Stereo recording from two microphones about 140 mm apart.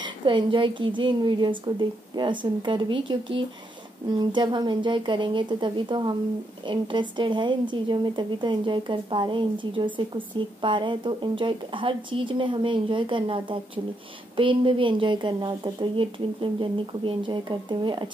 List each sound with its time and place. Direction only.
0.0 s a woman's voice: 35° right (ahead or behind)